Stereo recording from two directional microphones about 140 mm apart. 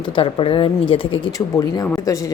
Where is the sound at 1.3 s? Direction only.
25° left (ahead or behind).